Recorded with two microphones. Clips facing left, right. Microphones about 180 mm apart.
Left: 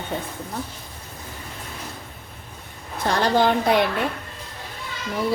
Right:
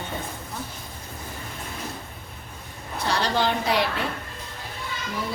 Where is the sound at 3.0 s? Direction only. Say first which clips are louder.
Left 5 dB; 50° left (ahead or behind).